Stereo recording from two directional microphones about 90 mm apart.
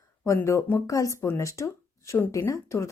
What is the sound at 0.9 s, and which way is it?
A woman's voice, 35° left (ahead or behind).